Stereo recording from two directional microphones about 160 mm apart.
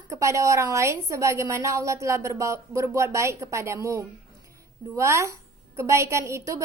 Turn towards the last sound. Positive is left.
turn(degrees=-20)  # may be behind; listen again after turning